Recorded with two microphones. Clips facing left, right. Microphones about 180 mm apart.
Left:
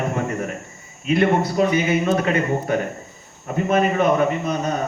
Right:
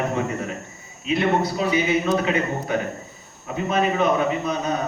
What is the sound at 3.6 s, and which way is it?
Speech, 55° left (ahead or behind).